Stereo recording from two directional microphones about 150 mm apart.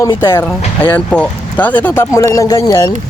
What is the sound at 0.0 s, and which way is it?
Speech, 20° left (ahead or behind).